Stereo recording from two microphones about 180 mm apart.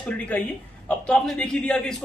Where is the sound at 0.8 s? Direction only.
5° left (ahead or behind).